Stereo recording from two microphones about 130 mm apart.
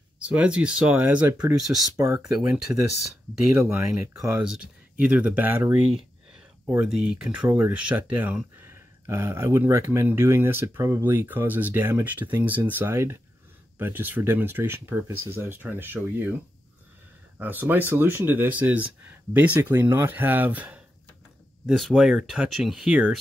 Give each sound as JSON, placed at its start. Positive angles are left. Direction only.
{"t": 0.2, "sound": "speech", "side_deg": -10}
{"t": 2.0, "sound": "speech", "side_deg": -25}
{"t": 4.4, "sound": "speech", "side_deg": -10}
{"t": 17.4, "sound": "speech", "side_deg": -15}
{"t": 21.6, "sound": "speech", "side_deg": 0}